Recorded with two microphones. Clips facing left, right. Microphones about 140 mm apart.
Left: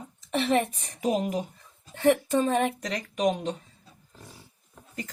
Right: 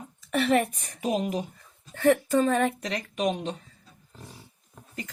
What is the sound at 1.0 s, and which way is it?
Speech, 40° left (ahead or behind).